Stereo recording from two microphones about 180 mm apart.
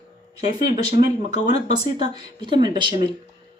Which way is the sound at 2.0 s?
25° right (ahead or behind).